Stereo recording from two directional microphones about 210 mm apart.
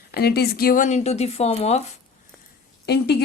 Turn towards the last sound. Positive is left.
turn(degrees=50)  # may be behind; listen again after turning